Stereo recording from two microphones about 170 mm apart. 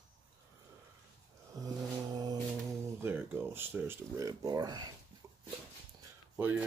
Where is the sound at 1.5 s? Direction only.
20° right (ahead or behind).